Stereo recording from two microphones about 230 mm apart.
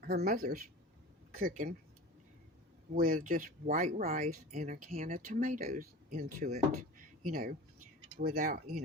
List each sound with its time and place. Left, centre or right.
0.0 s speech: right
2.9 s speech: right